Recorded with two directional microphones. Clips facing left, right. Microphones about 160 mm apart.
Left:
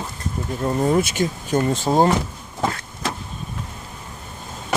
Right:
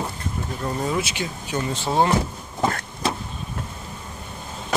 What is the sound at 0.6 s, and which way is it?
Speech, 45° left (ahead or behind).